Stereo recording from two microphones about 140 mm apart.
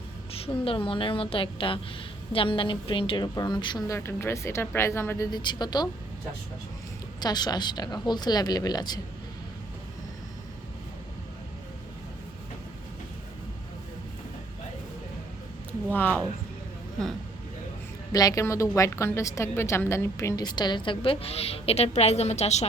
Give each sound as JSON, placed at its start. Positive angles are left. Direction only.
{"t": 0.3, "sound": "a woman's voice", "side_deg": 40}
{"t": 5.3, "sound": "a woman's voice", "side_deg": 30}
{"t": 7.2, "sound": "a woman's voice", "side_deg": 30}
{"t": 15.9, "sound": "speech", "side_deg": 10}
{"t": 18.1, "sound": "a woman's voice", "side_deg": 25}